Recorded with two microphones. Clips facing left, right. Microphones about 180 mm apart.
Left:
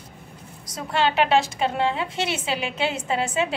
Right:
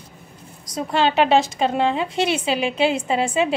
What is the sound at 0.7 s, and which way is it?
A woman's voice, 15° right (ahead or behind).